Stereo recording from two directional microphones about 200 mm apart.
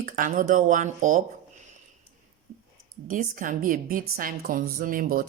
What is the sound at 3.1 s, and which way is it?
A woman's voice, 40° right (ahead or behind).